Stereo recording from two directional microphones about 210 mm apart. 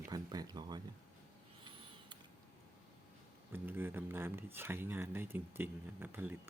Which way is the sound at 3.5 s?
10° right (ahead or behind).